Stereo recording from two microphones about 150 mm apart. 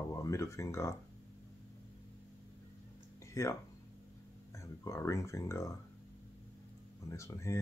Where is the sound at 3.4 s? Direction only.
20° left (ahead or behind).